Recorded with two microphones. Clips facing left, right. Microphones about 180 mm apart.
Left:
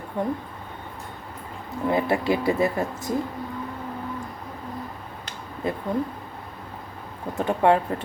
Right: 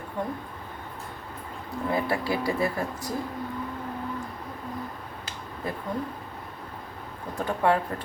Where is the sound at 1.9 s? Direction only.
20° left (ahead or behind).